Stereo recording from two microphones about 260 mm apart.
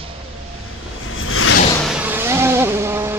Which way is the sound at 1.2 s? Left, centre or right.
Left.